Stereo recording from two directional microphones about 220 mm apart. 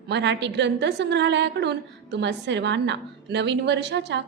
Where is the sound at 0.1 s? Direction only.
50° right (ahead or behind).